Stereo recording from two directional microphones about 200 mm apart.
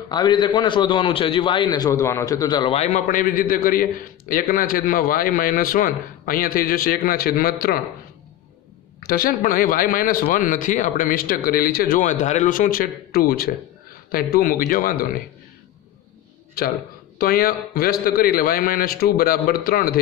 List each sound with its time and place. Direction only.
0.1 s a man's voice: 20° left (ahead or behind); by 7.8 s 50° left (ahead or behind)
9.0 s speech: 50° left (ahead or behind)
17.2 s speech: 45° left (ahead or behind)